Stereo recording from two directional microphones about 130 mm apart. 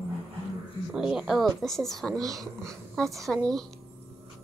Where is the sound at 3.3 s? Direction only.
5° left (ahead or behind).